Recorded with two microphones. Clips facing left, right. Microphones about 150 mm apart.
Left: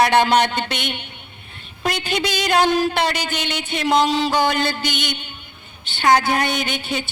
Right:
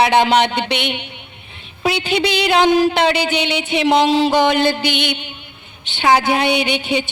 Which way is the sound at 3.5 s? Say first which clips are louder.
Right 3 dB; 5° right (ahead or behind).